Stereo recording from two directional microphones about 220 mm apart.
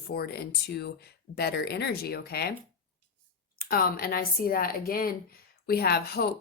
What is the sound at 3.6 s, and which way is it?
Speech, 40° left (ahead or behind).